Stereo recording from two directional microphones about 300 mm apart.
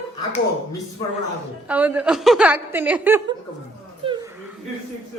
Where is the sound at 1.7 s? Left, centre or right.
Centre.